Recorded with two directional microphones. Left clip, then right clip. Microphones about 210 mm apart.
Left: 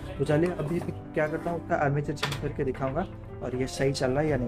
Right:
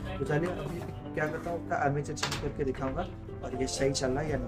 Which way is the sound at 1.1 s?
45° left (ahead or behind).